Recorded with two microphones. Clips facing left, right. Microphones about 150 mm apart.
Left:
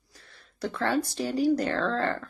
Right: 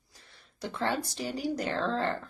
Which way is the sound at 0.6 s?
15° right (ahead or behind).